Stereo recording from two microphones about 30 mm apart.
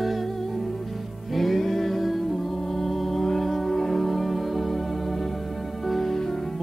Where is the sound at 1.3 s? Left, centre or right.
Centre.